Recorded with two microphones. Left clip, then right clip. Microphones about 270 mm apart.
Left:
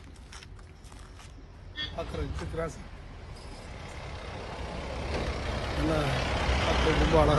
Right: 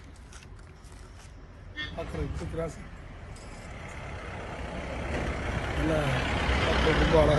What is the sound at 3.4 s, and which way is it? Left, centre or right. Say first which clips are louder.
Vehicle: right 1 dB; left.